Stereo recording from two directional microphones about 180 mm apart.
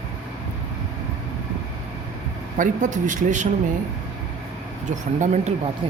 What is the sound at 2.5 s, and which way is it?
Speech, 45° right (ahead or behind).